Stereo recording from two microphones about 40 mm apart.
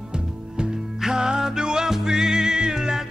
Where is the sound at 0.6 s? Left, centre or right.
Centre.